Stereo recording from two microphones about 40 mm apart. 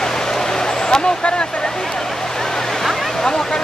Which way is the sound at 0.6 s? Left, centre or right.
Centre.